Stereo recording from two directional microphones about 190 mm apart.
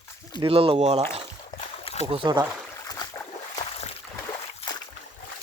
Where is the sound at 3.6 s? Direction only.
35° left (ahead or behind).